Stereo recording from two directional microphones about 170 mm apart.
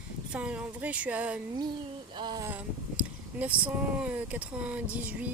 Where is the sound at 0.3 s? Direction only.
5° right (ahead or behind).